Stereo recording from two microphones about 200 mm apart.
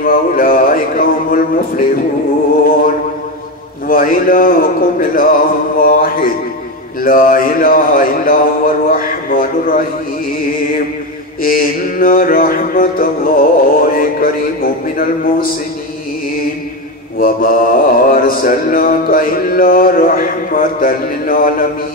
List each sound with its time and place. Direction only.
0.0 s a sound: 45° left (ahead or behind)
3.8 s mantra: 45° left (ahead or behind)
11.4 s mantra: 45° left (ahead or behind)
17.2 s mantra: 45° left (ahead or behind)